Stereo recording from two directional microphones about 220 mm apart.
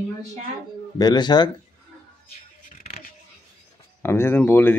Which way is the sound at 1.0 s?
20° left (ahead or behind).